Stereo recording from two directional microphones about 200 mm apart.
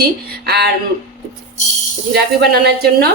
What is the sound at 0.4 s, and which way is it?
Speech, 55° right (ahead or behind).